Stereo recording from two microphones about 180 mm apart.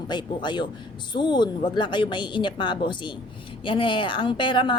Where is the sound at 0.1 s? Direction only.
25° left (ahead or behind).